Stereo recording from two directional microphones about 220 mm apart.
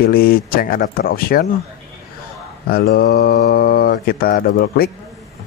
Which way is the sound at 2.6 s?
45° left (ahead or behind).